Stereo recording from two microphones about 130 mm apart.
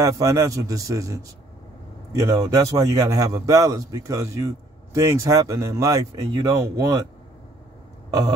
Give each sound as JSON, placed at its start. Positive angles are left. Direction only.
{"t": 0.0, "sound": "a man's voice", "side_deg": -25}